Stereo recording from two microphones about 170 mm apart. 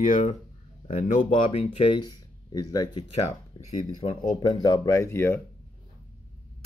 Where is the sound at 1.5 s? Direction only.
35° left (ahead or behind).